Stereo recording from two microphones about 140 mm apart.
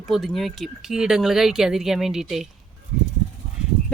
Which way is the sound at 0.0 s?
Centre (ahead or behind).